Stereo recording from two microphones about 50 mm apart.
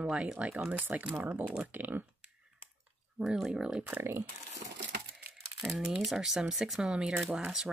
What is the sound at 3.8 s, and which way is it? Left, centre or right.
Speech, right.